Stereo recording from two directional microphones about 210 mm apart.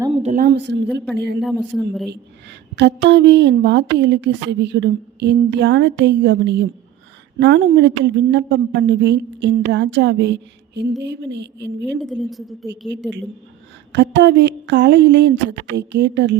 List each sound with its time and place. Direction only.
0.1 s a sound: 30° right (ahead or behind)
0.4 s a woman's voice: 55° right (ahead or behind)
1.4 s a man's voice: centre (ahead or behind)
2.0 s a woman's voice: 55° right (ahead or behind)
12.0 s a man's voice: centre (ahead or behind)
13.9 s a woman's voice: 55° right (ahead or behind)